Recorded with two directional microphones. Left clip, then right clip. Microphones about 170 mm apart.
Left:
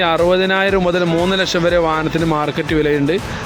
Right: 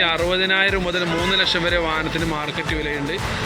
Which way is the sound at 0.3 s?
40° left (ahead or behind).